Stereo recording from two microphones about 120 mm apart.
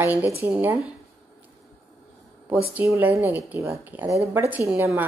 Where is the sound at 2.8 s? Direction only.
20° right (ahead or behind).